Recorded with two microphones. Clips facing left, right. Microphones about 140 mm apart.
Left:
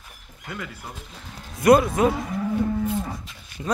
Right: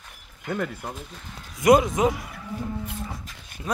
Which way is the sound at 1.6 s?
15° right (ahead or behind).